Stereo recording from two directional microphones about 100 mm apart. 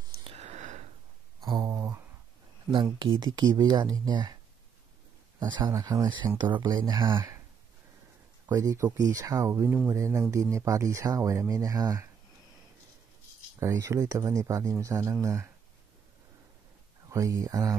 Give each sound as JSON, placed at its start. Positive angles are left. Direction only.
{"t": 0.2, "sound": "sniff", "side_deg": -80}
{"t": 1.4, "sound": "a sound", "side_deg": -40}
{"t": 2.7, "sound": "speech", "side_deg": -50}
{"t": 5.4, "sound": "speech", "side_deg": -50}
{"t": 5.7, "sound": "speech", "side_deg": -35}
{"t": 6.0, "sound": "speech", "side_deg": -50}
{"t": 7.2, "sound": "a sound", "side_deg": -25}
{"t": 8.5, "sound": "speech", "side_deg": -35}
{"t": 13.6, "sound": "speech", "side_deg": -30}
{"t": 17.1, "sound": "speech", "side_deg": -30}